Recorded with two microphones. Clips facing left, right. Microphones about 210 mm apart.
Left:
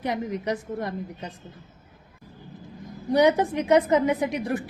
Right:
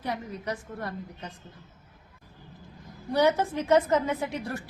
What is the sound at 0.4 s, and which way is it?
Speech, 15° left (ahead or behind).